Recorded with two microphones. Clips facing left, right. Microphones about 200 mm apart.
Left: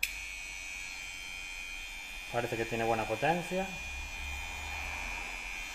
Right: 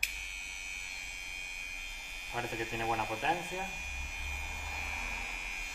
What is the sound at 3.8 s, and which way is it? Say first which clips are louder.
Electric shaver: even; centre (ahead or behind).